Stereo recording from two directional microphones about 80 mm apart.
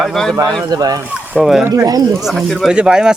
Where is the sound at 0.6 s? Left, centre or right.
Right.